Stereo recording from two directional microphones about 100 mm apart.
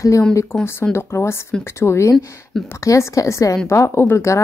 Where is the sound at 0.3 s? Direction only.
30° left (ahead or behind).